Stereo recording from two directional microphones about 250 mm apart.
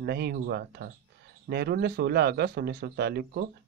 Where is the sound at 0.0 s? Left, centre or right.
Right.